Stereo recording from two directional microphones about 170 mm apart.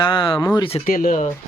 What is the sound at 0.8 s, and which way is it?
Speech, 55° left (ahead or behind).